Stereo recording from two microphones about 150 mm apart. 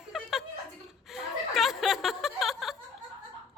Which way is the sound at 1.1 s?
Centre (ahead or behind).